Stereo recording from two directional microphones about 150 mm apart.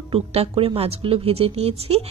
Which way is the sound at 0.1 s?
40° right (ahead or behind).